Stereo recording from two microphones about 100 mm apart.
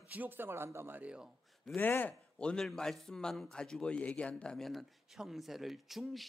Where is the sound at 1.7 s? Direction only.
20° left (ahead or behind).